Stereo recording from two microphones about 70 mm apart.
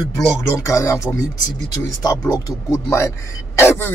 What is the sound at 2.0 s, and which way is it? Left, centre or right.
Speech, left.